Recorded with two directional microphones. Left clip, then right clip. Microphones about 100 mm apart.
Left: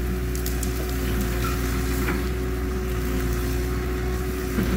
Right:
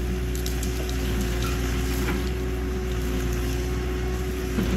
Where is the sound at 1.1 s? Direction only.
35° left (ahead or behind).